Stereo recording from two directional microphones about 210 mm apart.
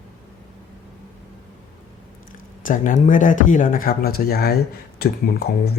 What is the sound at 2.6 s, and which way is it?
Speech, 40° left (ahead or behind).